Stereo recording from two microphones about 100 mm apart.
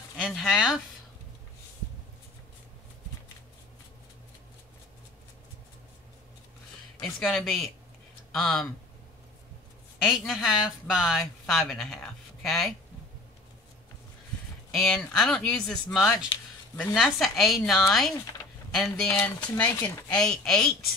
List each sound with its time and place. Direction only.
0.2 s speech: centre (ahead or behind)
7.0 s speech: 5° left (ahead or behind)
10.0 s speech: centre (ahead or behind)
14.7 s speech: centre (ahead or behind)
16.0 s speech: 5° right (ahead or behind); by 19.7 s 15° left (ahead or behind)
19.7 s speech: 30° left (ahead or behind)
20.1 s speech: 5° left (ahead or behind)